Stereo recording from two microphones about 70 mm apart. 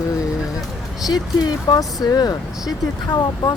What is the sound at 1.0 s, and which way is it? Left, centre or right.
Speech, left.